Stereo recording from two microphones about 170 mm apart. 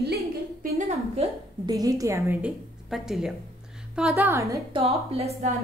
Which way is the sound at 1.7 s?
20° right (ahead or behind).